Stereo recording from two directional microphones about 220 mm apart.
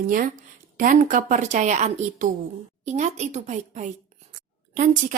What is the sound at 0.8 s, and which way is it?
A woman's voice, 35° right (ahead or behind).